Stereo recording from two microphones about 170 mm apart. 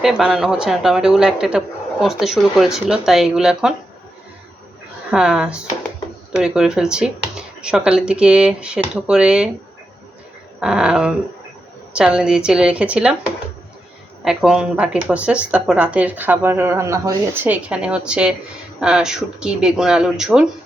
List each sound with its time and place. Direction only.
0.0 s speech: 5° right (ahead or behind)
5.1 s speech: 5° right (ahead or behind)
10.6 s speech: 5° right (ahead or behind)
14.3 s speech: 5° right (ahead or behind)